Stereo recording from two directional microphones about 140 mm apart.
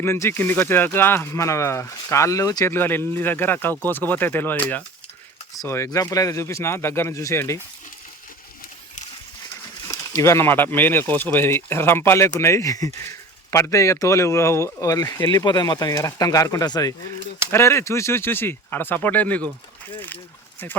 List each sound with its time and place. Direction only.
0.0 s speech: 15° left (ahead or behind)
9.9 s speech: 25° left (ahead or behind)